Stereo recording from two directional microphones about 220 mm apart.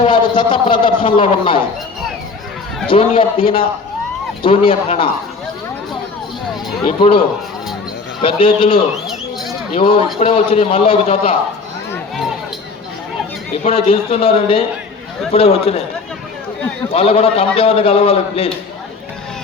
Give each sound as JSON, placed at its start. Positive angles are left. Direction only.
{"t": 0.0, "sound": "a man's voice", "side_deg": 20}
{"t": 2.8, "sound": "a man's voice", "side_deg": 25}
{"t": 6.8, "sound": "a man's voice", "side_deg": 25}
{"t": 9.0, "sound": "a sound", "side_deg": 0}
{"t": 9.7, "sound": "a man's voice", "side_deg": 25}
{"t": 13.7, "sound": "a man's voice", "side_deg": 25}
{"t": 16.9, "sound": "a man's voice", "side_deg": 25}